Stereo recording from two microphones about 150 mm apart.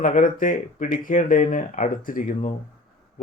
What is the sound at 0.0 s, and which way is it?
Speech, 60° left (ahead or behind).